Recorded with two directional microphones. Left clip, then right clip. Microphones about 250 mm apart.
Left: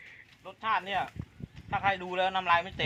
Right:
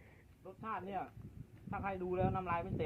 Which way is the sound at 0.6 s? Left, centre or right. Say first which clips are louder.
Left 13 dB; centre.